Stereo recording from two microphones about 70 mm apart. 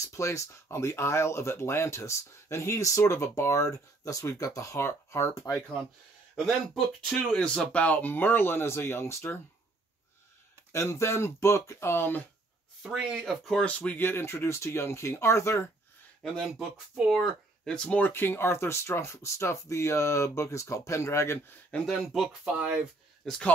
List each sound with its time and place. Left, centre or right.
0.0 s speech: left
6.4 s speech: centre
7.2 s speech: centre; by 9.4 s left
10.7 s speech: left
12.8 s speech: centre
13.7 s speech: left
16.2 s speech: centre
17.2 s speech: centre
18.1 s speech: left
21.8 s speech: centre
22.4 s speech: centre